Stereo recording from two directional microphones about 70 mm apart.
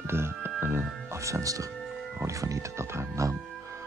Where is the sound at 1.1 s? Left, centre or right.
Right.